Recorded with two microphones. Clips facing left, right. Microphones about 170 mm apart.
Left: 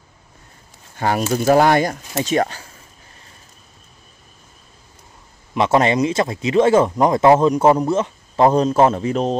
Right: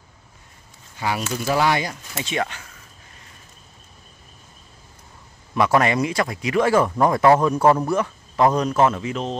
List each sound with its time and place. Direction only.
0.9 s speech: 50° left (ahead or behind)
5.5 s speech: 25° left (ahead or behind); by 9.4 s 40° left (ahead or behind)